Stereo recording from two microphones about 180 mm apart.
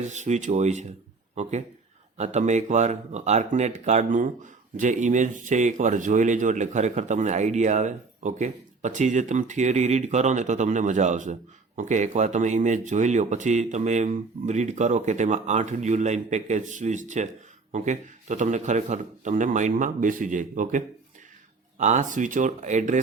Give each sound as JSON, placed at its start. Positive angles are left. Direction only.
{"t": 0.0, "sound": "speech", "side_deg": -40}